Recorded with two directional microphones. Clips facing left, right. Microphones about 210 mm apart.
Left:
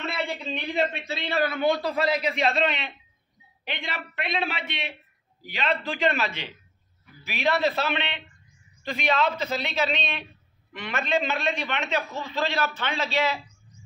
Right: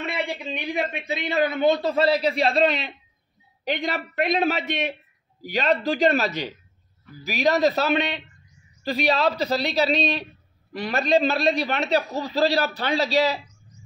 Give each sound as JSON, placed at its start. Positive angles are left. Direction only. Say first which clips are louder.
{"t": 0.0, "sound": "a man's voice", "louder": "right 2 dB", "side_deg": -15}